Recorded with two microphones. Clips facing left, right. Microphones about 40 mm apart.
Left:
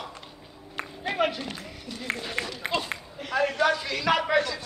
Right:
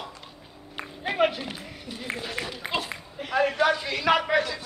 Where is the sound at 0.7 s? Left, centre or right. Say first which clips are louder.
Even; centre.